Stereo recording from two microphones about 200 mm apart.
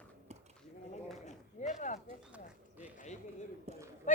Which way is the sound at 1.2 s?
35° left (ahead or behind).